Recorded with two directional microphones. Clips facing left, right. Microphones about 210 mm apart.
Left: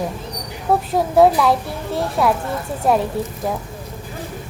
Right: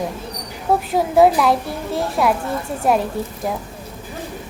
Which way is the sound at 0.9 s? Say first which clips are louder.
Even; centre (ahead or behind).